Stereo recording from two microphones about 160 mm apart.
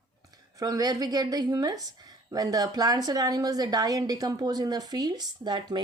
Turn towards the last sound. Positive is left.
turn(degrees=-25)  # may be behind; listen again after turning